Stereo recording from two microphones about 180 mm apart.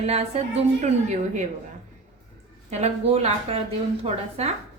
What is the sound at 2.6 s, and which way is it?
A woman's voice, 35° right (ahead or behind).